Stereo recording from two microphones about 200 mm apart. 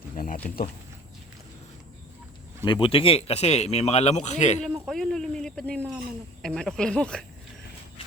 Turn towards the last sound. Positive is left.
turn(degrees=5)  # may be behind; listen again after turning